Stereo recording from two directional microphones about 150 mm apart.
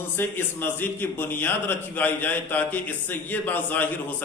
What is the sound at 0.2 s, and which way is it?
A man's voice, 15° left (ahead or behind).